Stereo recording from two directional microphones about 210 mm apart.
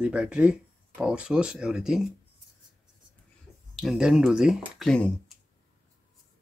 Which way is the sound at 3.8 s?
Centre (ahead or behind).